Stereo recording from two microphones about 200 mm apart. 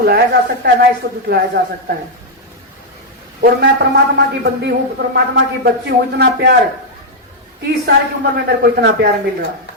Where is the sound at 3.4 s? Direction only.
55° right (ahead or behind).